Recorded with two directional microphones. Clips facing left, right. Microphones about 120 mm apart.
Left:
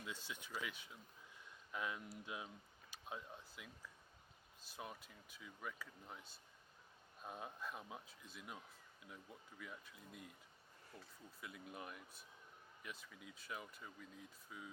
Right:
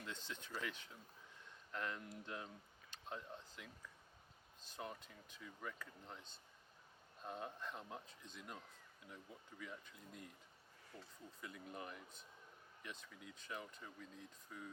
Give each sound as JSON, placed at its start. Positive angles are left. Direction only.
{"t": 0.0, "sound": "speech", "side_deg": 10}
{"t": 2.9, "sound": "a sound", "side_deg": 10}
{"t": 4.6, "sound": "speech", "side_deg": 5}
{"t": 11.3, "sound": "speech", "side_deg": 5}